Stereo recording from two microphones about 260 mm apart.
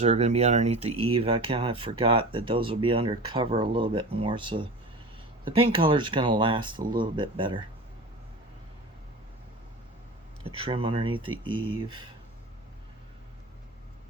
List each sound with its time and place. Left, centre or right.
0.0 s speech: right
10.4 s speech: right